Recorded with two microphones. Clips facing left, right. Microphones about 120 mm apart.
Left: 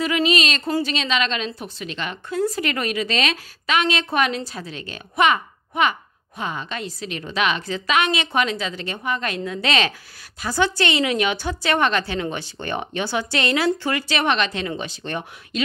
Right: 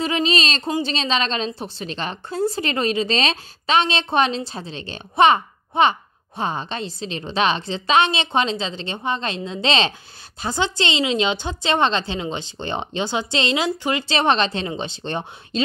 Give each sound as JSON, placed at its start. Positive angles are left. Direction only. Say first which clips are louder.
{"t": 0.0, "sound": "a woman's voice", "louder": "left 1 dB", "side_deg": -30}